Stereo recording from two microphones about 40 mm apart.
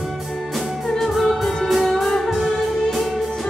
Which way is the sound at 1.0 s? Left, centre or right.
Centre.